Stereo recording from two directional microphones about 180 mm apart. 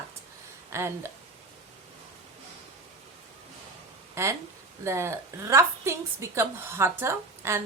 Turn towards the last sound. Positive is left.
turn(degrees=-15)  # may be behind; listen again after turning